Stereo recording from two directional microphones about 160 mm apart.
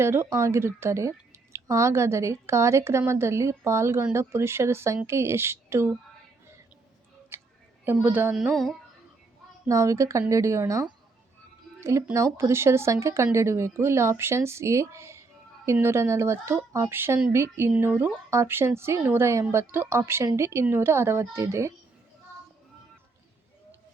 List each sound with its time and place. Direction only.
0.0 s a woman's voice: 15° right (ahead or behind)
7.3 s a sound: 15° right (ahead or behind)
7.9 s a woman's voice: 10° right (ahead or behind)
8.4 s music: centre (ahead or behind)
9.6 s a woman's voice: 20° right (ahead or behind)